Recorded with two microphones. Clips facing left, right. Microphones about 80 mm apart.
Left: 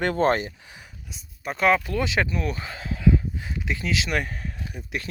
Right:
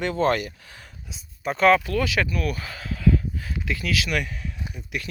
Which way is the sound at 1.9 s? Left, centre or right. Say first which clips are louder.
Right 1 dB; left.